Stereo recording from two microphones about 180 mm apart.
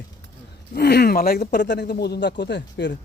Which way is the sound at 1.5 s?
70° left (ahead or behind).